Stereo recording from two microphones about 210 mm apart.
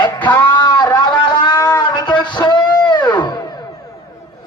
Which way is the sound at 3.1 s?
20° left (ahead or behind).